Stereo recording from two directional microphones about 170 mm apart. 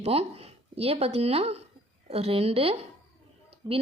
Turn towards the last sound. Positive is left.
turn(degrees=-25)  # may be behind; listen again after turning